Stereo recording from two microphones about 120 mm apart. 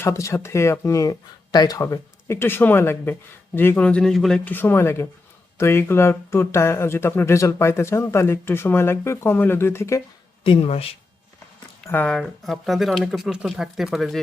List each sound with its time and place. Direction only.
0.0 s speech: 25° left (ahead or behind); by 4.4 s 5° left (ahead or behind)
4.4 s speech: 15° left (ahead or behind)
10.4 s speech: 50° left (ahead or behind)
11.9 s speech: 10° left (ahead or behind)